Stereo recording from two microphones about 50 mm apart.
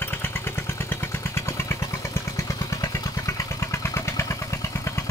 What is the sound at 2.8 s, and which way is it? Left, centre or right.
Vehicle, left.